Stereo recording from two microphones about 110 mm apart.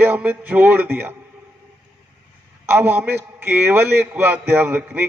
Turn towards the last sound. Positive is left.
turn(degrees=-20)  # may be behind; listen again after turning